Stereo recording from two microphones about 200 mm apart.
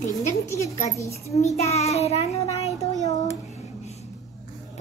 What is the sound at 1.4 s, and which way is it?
Child singing, 35° left (ahead or behind).